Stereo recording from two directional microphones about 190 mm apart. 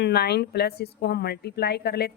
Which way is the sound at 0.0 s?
60° left (ahead or behind).